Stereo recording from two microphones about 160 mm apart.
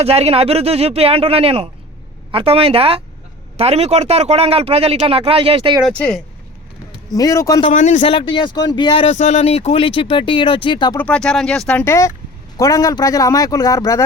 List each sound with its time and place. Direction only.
0.0 s speech: 40° right (ahead or behind)
6.0 s speech: 5° left (ahead or behind)
7.1 s speech: 20° left (ahead or behind)
7.7 s a man's voice: 50° left (ahead or behind)
8.0 s speech: 35° left (ahead or behind)
9.1 s speech: 45° left (ahead or behind); by 10.9 s 30° left (ahead or behind)
10.9 s speech: 5° left (ahead or behind)
12.5 s speech: 20° left (ahead or behind)